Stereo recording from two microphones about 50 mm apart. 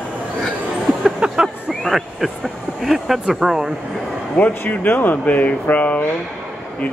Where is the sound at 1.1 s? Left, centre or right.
Centre.